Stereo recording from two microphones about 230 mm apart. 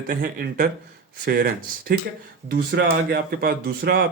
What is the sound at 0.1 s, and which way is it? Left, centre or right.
Speech, right.